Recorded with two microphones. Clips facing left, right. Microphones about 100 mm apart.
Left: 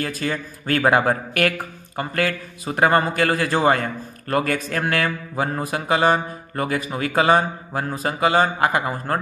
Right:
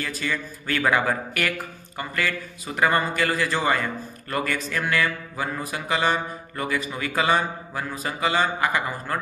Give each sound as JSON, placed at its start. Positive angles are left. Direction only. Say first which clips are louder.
{"t": 0.0, "sound": "speech", "louder": "left 4 dB", "side_deg": 45}
{"t": 2.0, "sound": "a man's voice", "louder": "left 4 dB", "side_deg": 55}